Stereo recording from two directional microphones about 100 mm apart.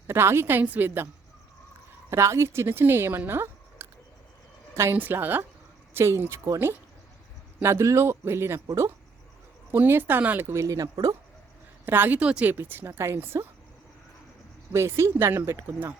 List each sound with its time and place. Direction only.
0.1 s speech: 25° right (ahead or behind)
2.0 s speech: 25° right (ahead or behind)
10.5 s speech: 30° right (ahead or behind)
11.9 s a woman's voice: 20° right (ahead or behind)
14.7 s speech: 30° right (ahead or behind)